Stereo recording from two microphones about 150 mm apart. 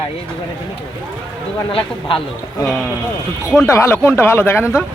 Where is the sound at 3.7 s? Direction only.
20° left (ahead or behind).